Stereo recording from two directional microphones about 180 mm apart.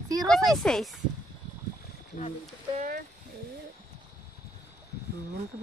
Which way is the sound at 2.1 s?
45° left (ahead or behind).